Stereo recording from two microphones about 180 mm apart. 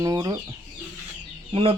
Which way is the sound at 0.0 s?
20° right (ahead or behind).